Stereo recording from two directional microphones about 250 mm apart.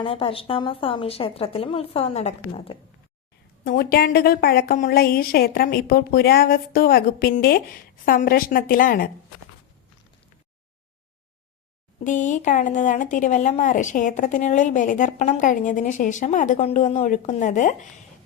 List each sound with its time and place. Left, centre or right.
0.0 s a woman's voice: left
3.6 s a woman's voice: left
12.0 s a woman's voice: left